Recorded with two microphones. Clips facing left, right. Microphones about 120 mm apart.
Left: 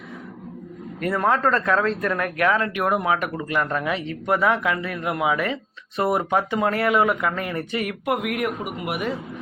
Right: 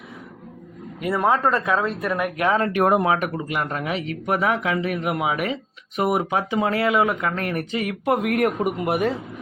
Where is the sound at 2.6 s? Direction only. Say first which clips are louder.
Right 4 dB; 35° right (ahead or behind); by 3.9 s 20° right (ahead or behind).